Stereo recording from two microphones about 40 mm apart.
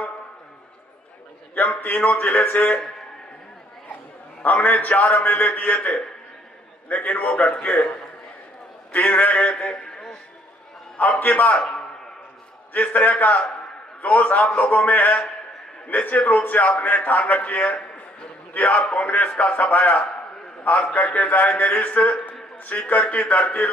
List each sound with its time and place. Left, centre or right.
1.5 s a man's voice: left
4.4 s a man's voice: left
8.9 s a man's voice: left
9.7 s a sound: centre
11.0 s a man's voice: left
11.5 s a man's voice: left
12.7 s a man's voice: left